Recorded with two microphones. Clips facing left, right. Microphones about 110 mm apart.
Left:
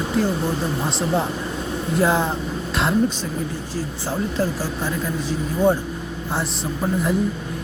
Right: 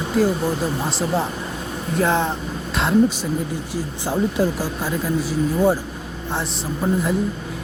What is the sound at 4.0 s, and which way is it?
Speech, 15° right (ahead or behind).